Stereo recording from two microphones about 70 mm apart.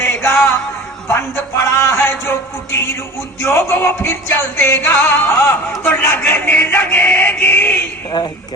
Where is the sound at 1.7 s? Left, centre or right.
Left.